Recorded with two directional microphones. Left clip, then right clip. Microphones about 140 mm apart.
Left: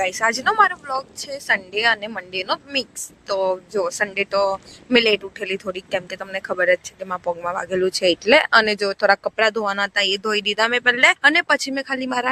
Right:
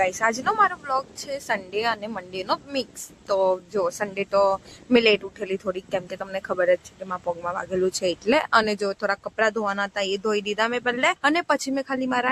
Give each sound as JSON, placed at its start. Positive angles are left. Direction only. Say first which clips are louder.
{"t": 0.1, "sound": "speech", "louder": "left 4 dB", "side_deg": 40}
{"t": 1.5, "sound": "a woman's voice", "louder": "left 7 dB", "side_deg": 20}
{"t": 7.9, "sound": "speech", "louder": "left 9 dB", "side_deg": 25}